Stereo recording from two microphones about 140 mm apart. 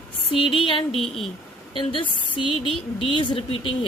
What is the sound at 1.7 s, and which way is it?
A woman's voice, 35° left (ahead or behind).